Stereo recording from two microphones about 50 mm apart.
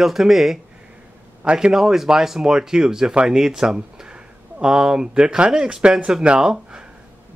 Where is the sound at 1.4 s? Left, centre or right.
Right.